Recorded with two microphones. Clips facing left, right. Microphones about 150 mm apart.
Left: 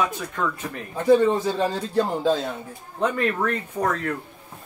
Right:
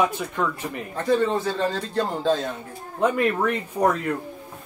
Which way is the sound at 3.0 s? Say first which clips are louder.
Right 2 dB; 10° right (ahead or behind).